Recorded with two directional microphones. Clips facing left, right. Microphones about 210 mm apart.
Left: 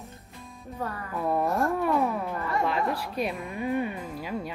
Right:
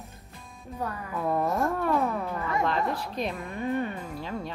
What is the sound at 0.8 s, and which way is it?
Speech, centre (ahead or behind).